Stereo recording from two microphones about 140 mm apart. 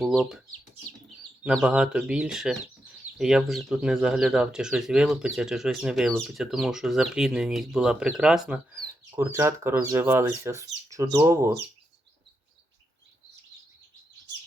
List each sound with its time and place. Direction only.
0.0 s speech: centre (ahead or behind)
1.6 s speech: 5° right (ahead or behind)
8.8 s speech: 20° right (ahead or behind)